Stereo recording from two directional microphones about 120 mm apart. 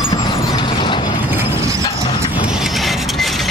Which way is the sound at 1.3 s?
25° right (ahead or behind).